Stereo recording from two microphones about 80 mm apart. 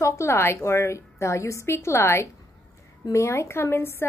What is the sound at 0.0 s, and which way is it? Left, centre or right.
A woman's voice, left.